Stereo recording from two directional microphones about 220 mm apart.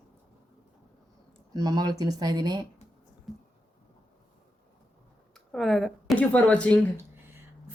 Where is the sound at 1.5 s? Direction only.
15° right (ahead or behind).